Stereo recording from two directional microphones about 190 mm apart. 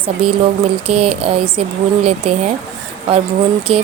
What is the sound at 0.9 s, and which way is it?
Speech, 30° right (ahead or behind).